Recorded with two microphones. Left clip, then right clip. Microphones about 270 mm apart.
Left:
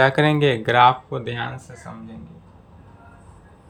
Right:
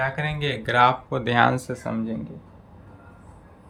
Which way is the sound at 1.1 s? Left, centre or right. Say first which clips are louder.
Right 8 dB; centre.